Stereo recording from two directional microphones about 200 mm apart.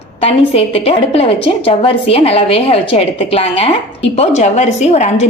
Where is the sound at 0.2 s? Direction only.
30° left (ahead or behind).